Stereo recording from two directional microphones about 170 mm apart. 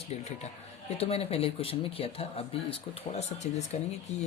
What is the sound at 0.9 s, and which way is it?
Speech, 35° left (ahead or behind).